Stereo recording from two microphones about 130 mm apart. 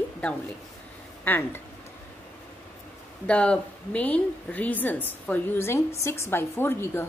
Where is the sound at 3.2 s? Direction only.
10° left (ahead or behind).